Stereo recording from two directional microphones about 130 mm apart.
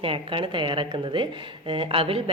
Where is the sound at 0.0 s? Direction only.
45° right (ahead or behind).